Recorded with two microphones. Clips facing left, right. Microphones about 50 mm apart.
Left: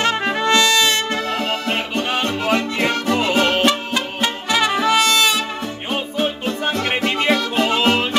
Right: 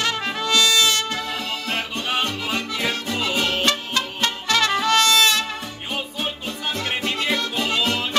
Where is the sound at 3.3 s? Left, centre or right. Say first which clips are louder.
Left 5 dB; left.